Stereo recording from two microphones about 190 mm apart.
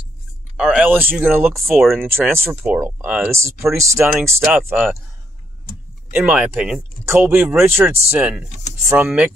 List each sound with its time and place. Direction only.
0.6 s speech: 5° right (ahead or behind)
1.8 s speech: centre (ahead or behind)
2.0 s speech: 10° right (ahead or behind)
6.1 s speech: 5° right (ahead or behind)